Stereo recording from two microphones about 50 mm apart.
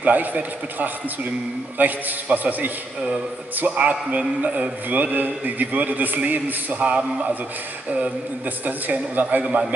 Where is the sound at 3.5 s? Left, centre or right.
Right.